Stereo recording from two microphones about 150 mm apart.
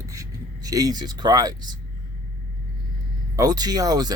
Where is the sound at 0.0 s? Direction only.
20° right (ahead or behind).